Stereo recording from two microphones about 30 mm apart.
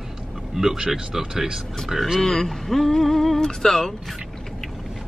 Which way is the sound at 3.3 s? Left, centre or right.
Centre.